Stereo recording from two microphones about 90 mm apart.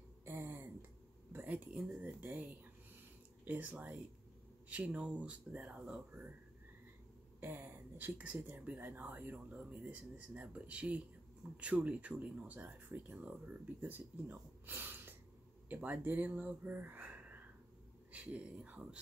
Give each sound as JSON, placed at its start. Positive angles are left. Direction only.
{"t": 0.2, "sound": "a sound", "side_deg": -25}
{"t": 1.3, "sound": "speech", "side_deg": -20}
{"t": 3.4, "sound": "speech", "side_deg": -20}
{"t": 7.3, "sound": "speech", "side_deg": -25}